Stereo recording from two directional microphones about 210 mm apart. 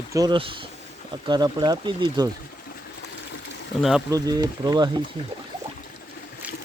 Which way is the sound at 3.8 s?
Centre (ahead or behind).